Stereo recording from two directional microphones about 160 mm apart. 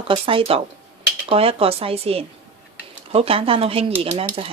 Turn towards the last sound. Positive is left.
turn(degrees=-40)  # may be behind; listen again after turning